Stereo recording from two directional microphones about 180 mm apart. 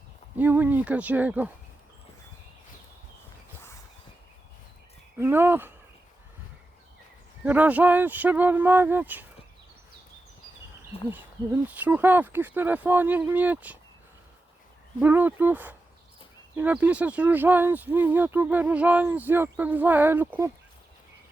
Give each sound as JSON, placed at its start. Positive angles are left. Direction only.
{"t": 0.3, "sound": "speech", "side_deg": -10}
{"t": 5.2, "sound": "speech", "side_deg": -10}
{"t": 7.4, "sound": "speech", "side_deg": -10}
{"t": 10.9, "sound": "a sound", "side_deg": 30}
{"t": 11.8, "sound": "speech", "side_deg": -10}
{"t": 15.0, "sound": "speech", "side_deg": -10}